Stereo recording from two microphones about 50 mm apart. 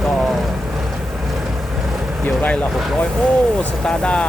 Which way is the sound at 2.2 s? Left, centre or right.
Left.